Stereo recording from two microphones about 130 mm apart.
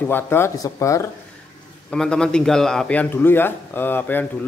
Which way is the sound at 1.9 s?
5° left (ahead or behind).